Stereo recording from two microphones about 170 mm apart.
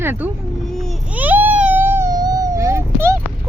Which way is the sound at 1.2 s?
10° right (ahead or behind).